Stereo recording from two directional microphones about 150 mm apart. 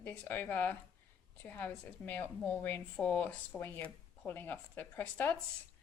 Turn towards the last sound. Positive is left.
turn(degrees=10)  # may be behind; listen again after turning